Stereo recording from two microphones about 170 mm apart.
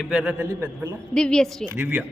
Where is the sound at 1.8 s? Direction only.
5° right (ahead or behind).